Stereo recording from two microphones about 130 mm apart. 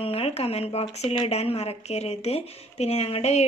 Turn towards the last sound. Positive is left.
turn(degrees=50)  # may be behind; listen again after turning